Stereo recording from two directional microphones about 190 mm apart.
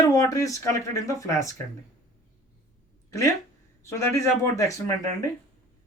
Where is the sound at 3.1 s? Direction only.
15° left (ahead or behind).